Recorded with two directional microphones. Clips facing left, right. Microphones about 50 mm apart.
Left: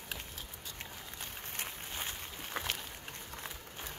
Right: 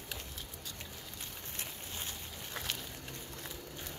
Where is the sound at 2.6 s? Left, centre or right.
Left.